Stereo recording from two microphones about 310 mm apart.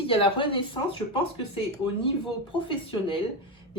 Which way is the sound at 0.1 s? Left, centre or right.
Centre.